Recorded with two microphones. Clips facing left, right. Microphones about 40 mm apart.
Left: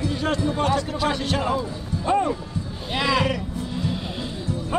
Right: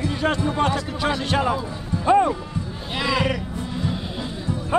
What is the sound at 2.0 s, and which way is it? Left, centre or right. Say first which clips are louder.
Speech: right 4 dB; right.